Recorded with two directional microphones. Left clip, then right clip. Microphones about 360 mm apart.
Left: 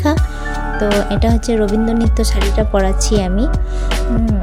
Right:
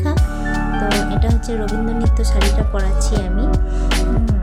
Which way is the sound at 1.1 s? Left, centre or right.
Centre.